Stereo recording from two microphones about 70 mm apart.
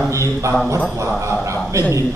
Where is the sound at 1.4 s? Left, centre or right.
Right.